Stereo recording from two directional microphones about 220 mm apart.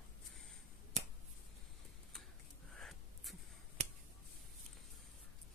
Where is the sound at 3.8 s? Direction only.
30° right (ahead or behind).